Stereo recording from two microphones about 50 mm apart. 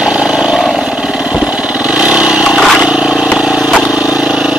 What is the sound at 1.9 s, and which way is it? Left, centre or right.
Vehicle, centre.